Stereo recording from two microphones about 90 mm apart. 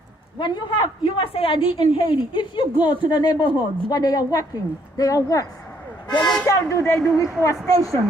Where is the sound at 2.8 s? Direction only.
55° left (ahead or behind); by 5.4 s 40° left (ahead or behind).